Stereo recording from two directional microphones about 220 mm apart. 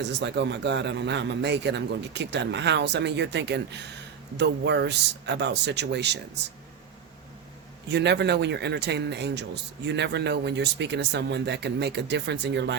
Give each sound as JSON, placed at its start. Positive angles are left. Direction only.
{"t": 0.0, "sound": "speech", "side_deg": -50}
{"t": 7.9, "sound": "speech", "side_deg": -50}